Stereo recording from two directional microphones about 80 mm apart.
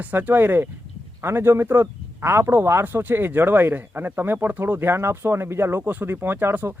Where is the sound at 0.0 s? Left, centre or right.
Right.